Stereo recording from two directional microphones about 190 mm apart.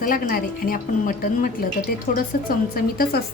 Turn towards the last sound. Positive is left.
turn(degrees=50)  # may be behind; listen again after turning